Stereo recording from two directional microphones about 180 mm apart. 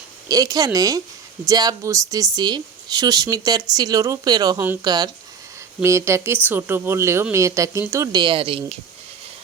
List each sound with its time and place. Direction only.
0.3 s speech: 20° right (ahead or behind)